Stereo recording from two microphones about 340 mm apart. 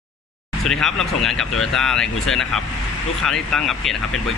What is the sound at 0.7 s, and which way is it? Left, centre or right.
Speech, centre.